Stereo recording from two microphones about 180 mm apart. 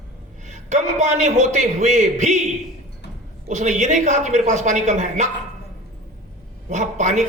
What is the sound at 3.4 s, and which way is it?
A man's voice, 40° right (ahead or behind).